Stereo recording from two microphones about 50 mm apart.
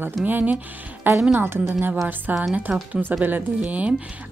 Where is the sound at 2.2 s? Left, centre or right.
Right.